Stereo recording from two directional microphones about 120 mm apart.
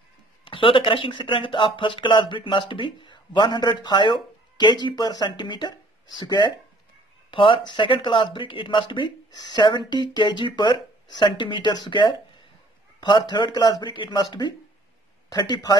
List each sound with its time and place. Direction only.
0.5 s speech: 45° left (ahead or behind)